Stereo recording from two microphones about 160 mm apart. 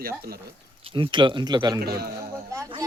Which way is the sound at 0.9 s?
30° right (ahead or behind).